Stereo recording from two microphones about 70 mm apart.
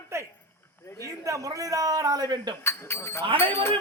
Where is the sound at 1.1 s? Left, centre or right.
Right.